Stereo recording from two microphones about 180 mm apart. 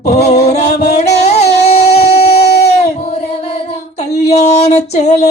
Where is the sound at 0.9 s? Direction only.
35° left (ahead or behind).